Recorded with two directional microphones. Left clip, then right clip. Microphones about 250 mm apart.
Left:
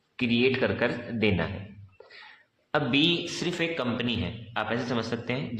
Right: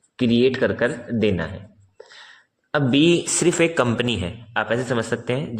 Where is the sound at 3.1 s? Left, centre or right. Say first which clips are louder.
Right 9 dB; right.